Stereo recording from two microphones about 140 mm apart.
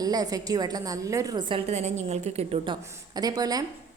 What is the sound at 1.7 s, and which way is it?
Speech, 55° right (ahead or behind).